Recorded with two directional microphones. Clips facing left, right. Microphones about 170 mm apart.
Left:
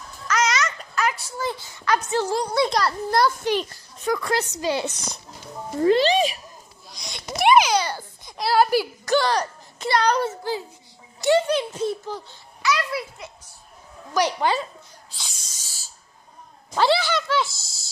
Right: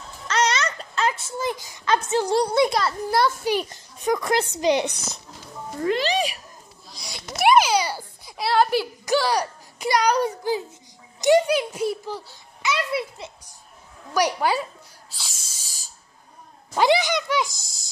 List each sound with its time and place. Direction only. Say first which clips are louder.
0.3 s a sound: even; 30° right (ahead or behind)
2.2 s a child's voice: right 2 dB; 15° right (ahead or behind)
3.7 s a child's voice: right 1 dB; 20° right (ahead or behind)
5.8 s a child's voice: left 5 dB; 30° left (ahead or behind)
6.9 s a sound: left 3 dB; 5° right (ahead or behind)
9.0 s a child's voice: left 1 dB; 10° right (ahead or behind)
12.6 s a child's voice: even; 25° right (ahead or behind)
14.1 s snake: even; 10° right (ahead or behind)
16.7 s speech: right 1 dB; 15° right (ahead or behind)